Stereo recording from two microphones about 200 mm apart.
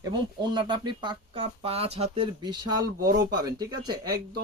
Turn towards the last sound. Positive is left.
turn(degrees=-20)  # may be behind; listen again after turning